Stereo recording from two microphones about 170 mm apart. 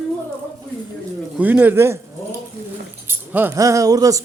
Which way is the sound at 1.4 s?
10° right (ahead or behind).